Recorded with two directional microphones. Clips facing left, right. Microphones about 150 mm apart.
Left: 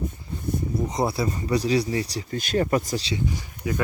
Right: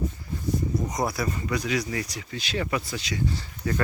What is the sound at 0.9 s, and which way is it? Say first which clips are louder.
Speech: left 3 dB; 25° left (ahead or behind).